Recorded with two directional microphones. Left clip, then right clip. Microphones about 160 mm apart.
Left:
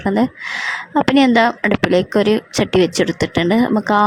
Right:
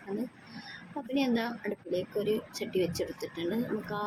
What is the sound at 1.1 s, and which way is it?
A woman's voice, 70° left (ahead or behind).